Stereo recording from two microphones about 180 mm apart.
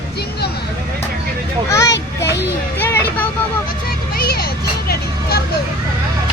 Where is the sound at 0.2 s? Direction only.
65° left (ahead or behind).